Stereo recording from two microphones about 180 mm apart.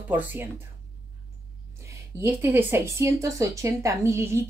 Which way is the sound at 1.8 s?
15° right (ahead or behind).